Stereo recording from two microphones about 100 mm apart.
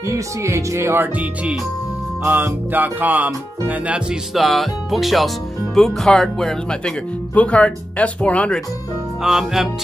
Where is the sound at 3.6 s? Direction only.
15° right (ahead or behind); by 8.6 s 15° left (ahead or behind).